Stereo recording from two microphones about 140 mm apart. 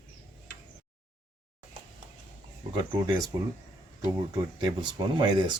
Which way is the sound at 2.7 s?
30° right (ahead or behind).